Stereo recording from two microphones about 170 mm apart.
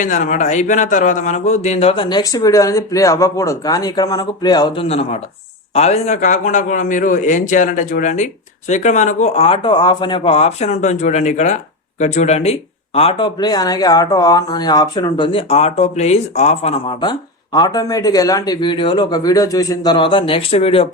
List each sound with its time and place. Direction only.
0.0 s speech: 50° left (ahead or behind); by 4.9 s 25° left (ahead or behind)
4.9 s speech: 35° left (ahead or behind)